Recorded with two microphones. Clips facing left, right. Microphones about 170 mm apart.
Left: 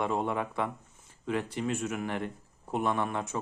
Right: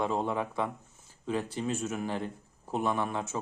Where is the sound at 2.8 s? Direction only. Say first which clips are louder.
Even; 5° right (ahead or behind).